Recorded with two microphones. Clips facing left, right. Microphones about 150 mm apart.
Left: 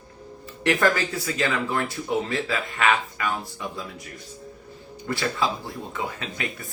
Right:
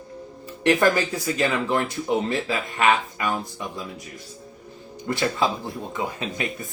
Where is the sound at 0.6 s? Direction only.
15° right (ahead or behind).